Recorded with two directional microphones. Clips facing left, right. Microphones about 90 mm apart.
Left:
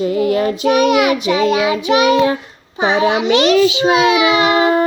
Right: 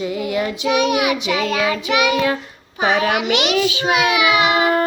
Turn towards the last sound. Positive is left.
turn(degrees=35)  # may be behind; listen again after turning